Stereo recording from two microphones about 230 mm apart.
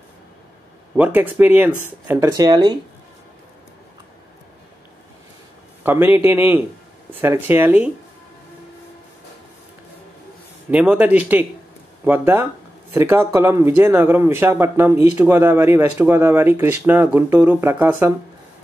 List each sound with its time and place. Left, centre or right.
0.9 s speech: centre
5.9 s speech: centre
10.7 s speech: centre